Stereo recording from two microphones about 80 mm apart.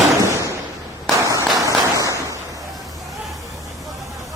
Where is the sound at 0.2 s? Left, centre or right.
Right.